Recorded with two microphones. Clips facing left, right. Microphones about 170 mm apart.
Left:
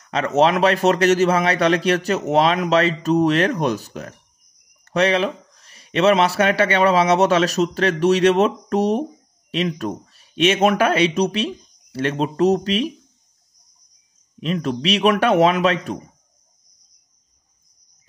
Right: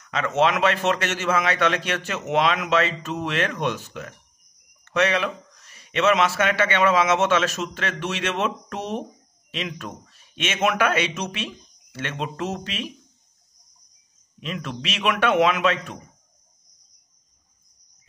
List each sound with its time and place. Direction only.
0.0 s speech: 35° left (ahead or behind)
14.4 s speech: 35° left (ahead or behind)